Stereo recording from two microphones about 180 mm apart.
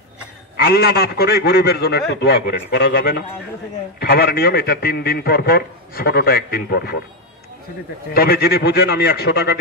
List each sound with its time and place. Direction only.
0.6 s a man's voice: 60° left (ahead or behind)
8.1 s a man's voice: 60° left (ahead or behind)